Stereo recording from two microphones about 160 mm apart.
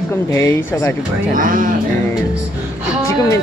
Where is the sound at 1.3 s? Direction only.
60° right (ahead or behind).